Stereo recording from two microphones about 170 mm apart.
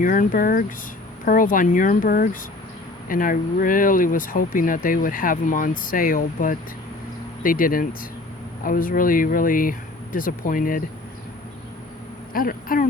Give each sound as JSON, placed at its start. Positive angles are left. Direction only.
{"t": 0.0, "sound": "speech", "side_deg": 55}
{"t": 12.3, "sound": "speech", "side_deg": 55}